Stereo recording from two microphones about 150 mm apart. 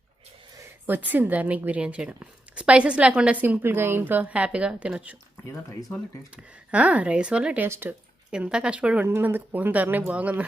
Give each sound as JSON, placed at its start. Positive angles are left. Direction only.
{"t": 0.9, "sound": "a woman's voice", "side_deg": -10}
{"t": 6.3, "sound": "a woman's voice", "side_deg": -10}